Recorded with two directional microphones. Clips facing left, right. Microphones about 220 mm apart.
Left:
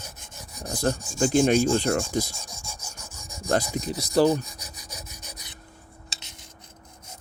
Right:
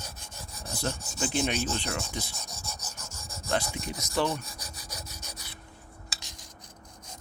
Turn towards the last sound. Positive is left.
turn(degrees=25)  # may be behind; listen again after turning